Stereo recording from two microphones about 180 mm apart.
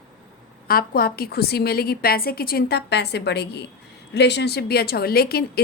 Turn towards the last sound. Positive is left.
turn(degrees=60)  # may be behind; listen again after turning